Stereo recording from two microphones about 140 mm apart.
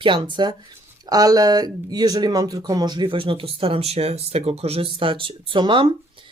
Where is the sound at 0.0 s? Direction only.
35° right (ahead or behind).